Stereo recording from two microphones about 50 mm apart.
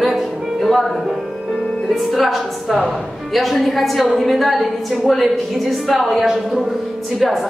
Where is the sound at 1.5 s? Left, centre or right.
Centre.